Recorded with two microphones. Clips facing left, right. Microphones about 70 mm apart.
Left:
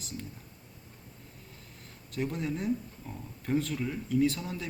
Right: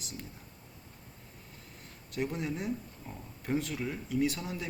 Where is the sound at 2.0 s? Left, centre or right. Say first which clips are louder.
Left 1 dB; centre.